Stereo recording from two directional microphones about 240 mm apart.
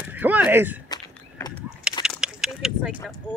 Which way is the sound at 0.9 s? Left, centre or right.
Centre.